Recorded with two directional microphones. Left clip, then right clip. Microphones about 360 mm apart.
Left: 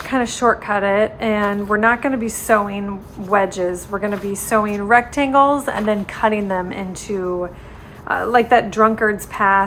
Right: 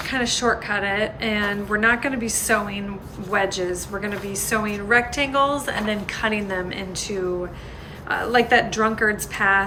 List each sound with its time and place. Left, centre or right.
0.1 s a woman's voice: centre
8.0 s a woman's voice: centre